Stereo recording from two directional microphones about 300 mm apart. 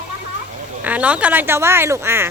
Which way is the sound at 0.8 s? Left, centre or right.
Centre.